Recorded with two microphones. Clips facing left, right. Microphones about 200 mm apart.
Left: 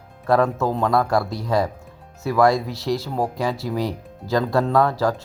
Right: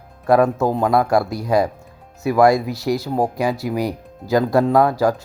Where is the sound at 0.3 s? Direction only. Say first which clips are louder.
Right 3 dB; 15° right (ahead or behind).